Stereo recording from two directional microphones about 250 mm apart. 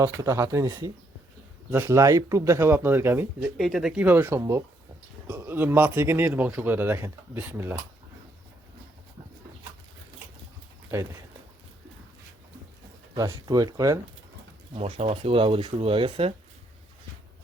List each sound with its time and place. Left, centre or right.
0.0 s speech: centre
10.9 s speech: centre
13.1 s speech: centre